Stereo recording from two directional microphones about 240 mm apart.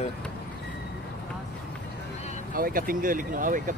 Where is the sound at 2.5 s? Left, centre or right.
Right.